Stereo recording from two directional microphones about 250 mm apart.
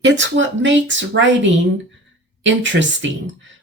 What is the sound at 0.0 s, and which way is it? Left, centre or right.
Speech, right.